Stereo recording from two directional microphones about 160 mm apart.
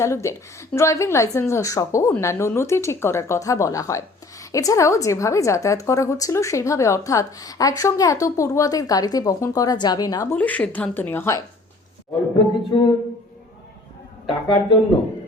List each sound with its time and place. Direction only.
0.0 s a woman's voice: 20° left (ahead or behind)
10.3 s a woman's voice: 10° left (ahead or behind)
12.7 s a woman's voice: 25° left (ahead or behind)
14.3 s a woman's voice: 30° left (ahead or behind)